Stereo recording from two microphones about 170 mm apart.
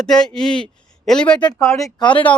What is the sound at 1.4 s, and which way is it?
Speech, 20° left (ahead or behind).